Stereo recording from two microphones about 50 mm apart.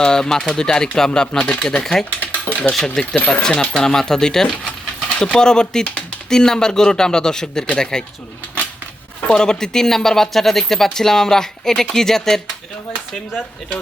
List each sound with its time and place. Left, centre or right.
0.0 s speech: centre
1.3 s speech: left
2.2 s a sound: left
2.7 s speech: centre
3.5 s speech: left
4.6 s coin: centre
6.2 s speech: centre
9.2 s speech: centre